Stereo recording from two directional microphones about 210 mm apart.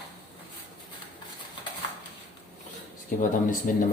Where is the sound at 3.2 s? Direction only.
40° left (ahead or behind).